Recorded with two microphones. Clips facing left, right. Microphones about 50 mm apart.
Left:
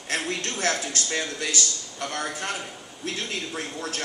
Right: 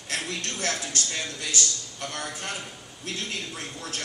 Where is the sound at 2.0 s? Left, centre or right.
Left.